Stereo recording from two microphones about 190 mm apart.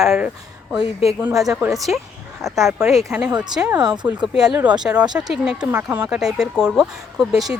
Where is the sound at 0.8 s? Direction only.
30° left (ahead or behind).